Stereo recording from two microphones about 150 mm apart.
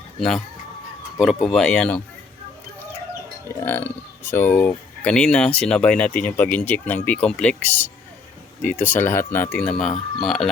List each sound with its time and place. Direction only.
0.2 s speech: centre (ahead or behind)
3.5 s speech: 15° left (ahead or behind)